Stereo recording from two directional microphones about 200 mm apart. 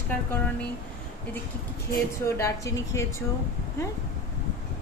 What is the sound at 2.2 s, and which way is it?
Speech, 15° left (ahead or behind).